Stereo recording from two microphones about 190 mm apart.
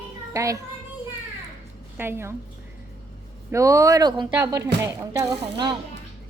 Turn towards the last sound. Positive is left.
turn(degrees=-20)  # may be behind; listen again after turning